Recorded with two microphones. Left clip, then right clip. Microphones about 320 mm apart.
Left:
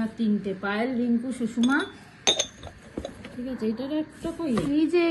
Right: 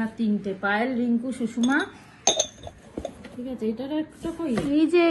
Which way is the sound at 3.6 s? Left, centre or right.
Right.